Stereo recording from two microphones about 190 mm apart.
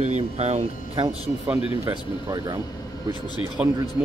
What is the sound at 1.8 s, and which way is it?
Speech, 20° right (ahead or behind).